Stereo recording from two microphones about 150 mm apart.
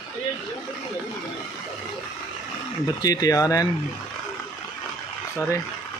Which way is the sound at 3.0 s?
25° left (ahead or behind).